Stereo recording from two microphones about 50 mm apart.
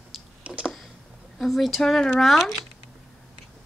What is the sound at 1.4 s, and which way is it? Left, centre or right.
Speech, centre.